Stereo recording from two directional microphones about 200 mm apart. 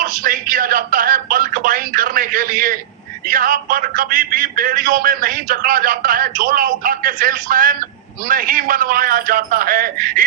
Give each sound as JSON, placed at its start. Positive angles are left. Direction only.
{"t": 0.0, "sound": "a man's voice", "side_deg": -45}